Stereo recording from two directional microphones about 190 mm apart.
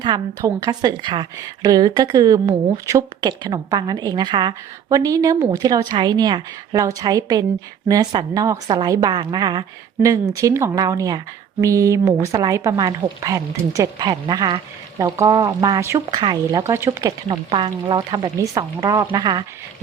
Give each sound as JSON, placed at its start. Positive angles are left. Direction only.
{"t": 0.0, "sound": "a woman's voice", "side_deg": -20}